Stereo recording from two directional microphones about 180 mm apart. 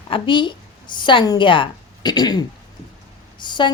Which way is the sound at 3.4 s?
25° left (ahead or behind).